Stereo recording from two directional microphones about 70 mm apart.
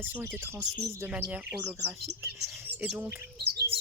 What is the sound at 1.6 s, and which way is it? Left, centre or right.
Speech, right.